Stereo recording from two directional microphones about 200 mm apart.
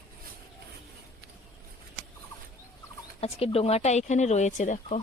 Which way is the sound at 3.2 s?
30° left (ahead or behind).